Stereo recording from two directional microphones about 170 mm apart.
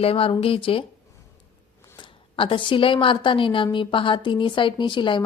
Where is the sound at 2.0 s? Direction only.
30° left (ahead or behind).